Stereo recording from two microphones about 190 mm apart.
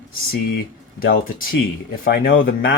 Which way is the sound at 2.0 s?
50° left (ahead or behind).